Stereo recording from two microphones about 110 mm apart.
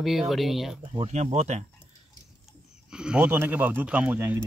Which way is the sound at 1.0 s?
90° right.